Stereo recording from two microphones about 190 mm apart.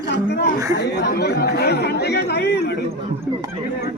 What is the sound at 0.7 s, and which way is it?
Chatter, 60° left (ahead or behind).